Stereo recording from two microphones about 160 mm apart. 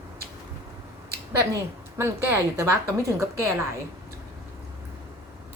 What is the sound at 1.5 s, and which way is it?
A woman's voice, 15° right (ahead or behind).